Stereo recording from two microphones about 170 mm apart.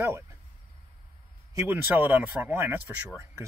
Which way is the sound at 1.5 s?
15° right (ahead or behind).